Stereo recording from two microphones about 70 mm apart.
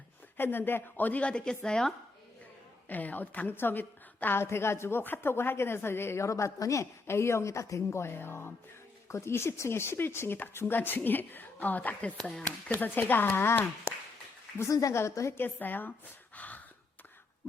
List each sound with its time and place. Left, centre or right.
0.3 s a woman's voice: left
1.3 s speech: centre
2.9 s a woman's voice: left
14.6 s a woman's voice: left
15.4 s speech: left
16.3 s gasp: left